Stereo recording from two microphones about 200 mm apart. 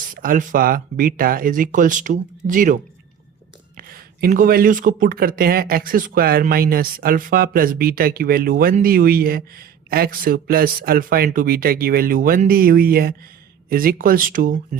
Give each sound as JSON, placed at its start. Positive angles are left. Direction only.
{"t": 0.1, "sound": "speech", "side_deg": -45}
{"t": 3.8, "sound": "speech", "side_deg": -50}